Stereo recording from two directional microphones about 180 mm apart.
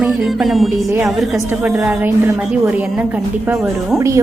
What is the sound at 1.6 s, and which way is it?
Speech, 10° right (ahead or behind).